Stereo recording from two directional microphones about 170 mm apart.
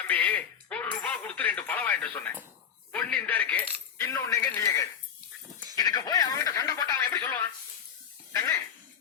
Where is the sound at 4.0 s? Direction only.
20° left (ahead or behind).